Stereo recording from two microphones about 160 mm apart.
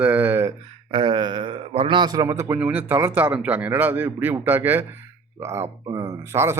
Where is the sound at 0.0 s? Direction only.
10° right (ahead or behind).